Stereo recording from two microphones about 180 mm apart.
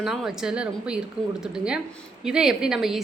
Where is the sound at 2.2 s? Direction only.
5° right (ahead or behind).